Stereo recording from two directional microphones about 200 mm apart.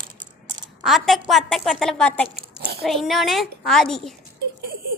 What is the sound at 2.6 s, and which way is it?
Speech, 50° right (ahead or behind).